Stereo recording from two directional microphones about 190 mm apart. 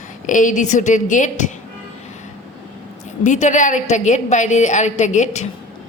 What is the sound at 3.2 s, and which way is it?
A woman's voice, 40° left (ahead or behind).